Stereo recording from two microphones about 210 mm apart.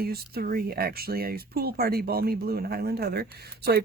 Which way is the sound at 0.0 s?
45° right (ahead or behind).